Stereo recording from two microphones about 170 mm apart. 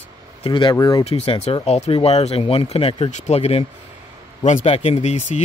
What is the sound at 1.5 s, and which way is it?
Speech, 35° left (ahead or behind).